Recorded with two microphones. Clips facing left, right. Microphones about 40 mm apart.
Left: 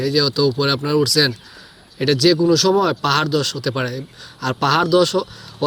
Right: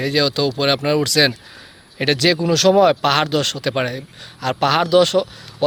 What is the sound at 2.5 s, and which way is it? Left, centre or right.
Speech, right.